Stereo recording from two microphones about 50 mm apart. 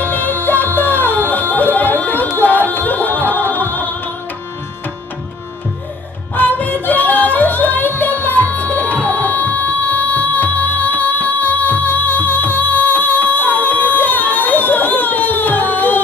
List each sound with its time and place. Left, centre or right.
0.0 s music: left
6.3 s music: left